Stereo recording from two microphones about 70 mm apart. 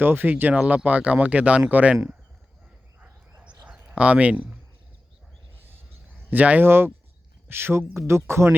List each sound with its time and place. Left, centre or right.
0.0 s speech: right
3.0 s a sound: right
3.9 s speech: centre
6.3 s speech: right
6.7 s speech: right